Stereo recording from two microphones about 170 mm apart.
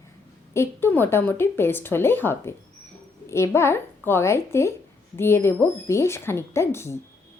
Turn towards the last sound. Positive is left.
turn(degrees=15)  # may be behind; listen again after turning